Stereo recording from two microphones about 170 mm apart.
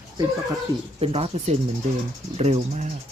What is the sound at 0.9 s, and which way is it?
Speech, 35° right (ahead or behind).